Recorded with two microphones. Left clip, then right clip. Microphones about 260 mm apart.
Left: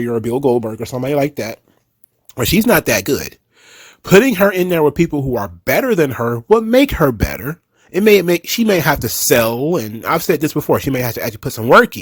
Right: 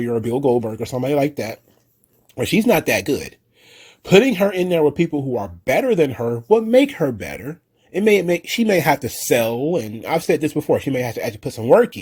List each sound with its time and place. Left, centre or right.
0.0 s speech: left